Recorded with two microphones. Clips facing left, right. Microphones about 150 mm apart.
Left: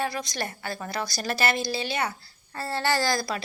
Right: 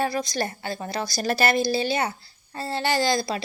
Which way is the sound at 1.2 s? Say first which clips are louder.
Right 5 dB; 40° right (ahead or behind).